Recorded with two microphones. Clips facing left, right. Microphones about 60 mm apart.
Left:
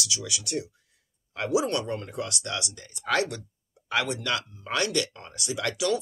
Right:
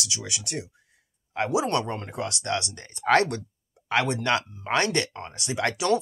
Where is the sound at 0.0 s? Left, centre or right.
Right.